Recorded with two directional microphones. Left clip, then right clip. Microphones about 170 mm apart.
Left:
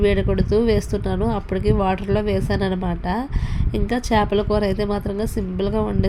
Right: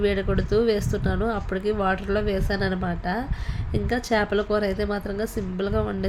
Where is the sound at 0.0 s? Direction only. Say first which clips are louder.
Left 4 dB; 15° left (ahead or behind).